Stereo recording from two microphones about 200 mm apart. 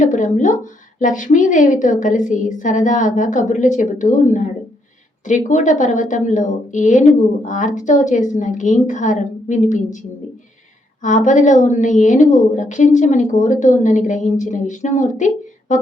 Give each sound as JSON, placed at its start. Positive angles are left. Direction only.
{"t": 0.0, "sound": "a woman's voice", "side_deg": 40}
{"t": 11.0, "sound": "a woman's voice", "side_deg": 40}
{"t": 15.7, "sound": "a sound", "side_deg": 40}